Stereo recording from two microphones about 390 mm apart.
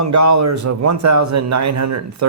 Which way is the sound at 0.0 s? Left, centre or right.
Right.